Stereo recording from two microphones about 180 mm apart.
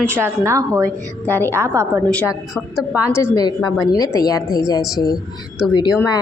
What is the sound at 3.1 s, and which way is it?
A woman's voice, 20° left (ahead or behind).